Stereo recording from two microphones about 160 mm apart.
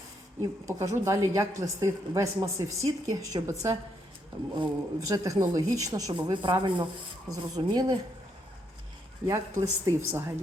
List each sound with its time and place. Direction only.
0.6 s speech: 20° right (ahead or behind)
4.5 s speech: 25° right (ahead or behind)
9.2 s speech: 20° right (ahead or behind)